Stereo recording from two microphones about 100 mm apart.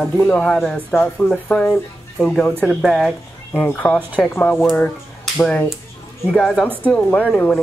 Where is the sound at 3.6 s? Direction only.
20° left (ahead or behind).